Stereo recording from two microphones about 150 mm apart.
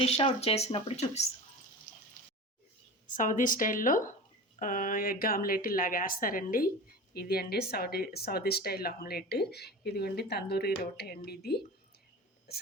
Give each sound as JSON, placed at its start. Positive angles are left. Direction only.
{"t": 0.3, "sound": "speech", "side_deg": 40}
{"t": 3.1, "sound": "a woman's voice", "side_deg": 60}